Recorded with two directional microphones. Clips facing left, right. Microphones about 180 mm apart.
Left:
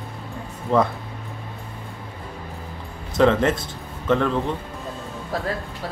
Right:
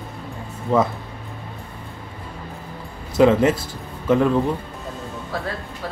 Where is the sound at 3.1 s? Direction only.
10° right (ahead or behind).